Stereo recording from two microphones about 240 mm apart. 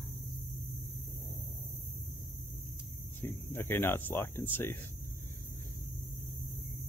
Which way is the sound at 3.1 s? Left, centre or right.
Centre.